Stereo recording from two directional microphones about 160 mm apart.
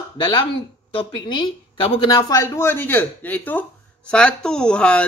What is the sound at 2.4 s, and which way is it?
Speech, 15° left (ahead or behind).